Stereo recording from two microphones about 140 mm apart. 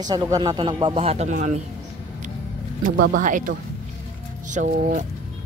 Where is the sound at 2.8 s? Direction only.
70° right (ahead or behind).